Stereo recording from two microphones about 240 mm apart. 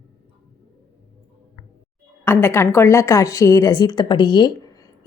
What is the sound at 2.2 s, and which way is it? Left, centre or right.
A woman's voice, centre.